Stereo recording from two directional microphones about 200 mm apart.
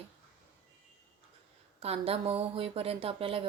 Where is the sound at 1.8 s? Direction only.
30° right (ahead or behind).